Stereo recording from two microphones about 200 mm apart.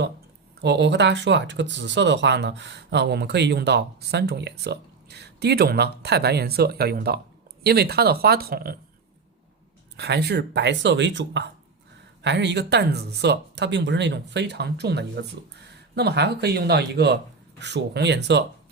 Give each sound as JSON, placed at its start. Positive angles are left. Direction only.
{"t": 0.6, "sound": "speech", "side_deg": -60}
{"t": 10.0, "sound": "speech", "side_deg": -55}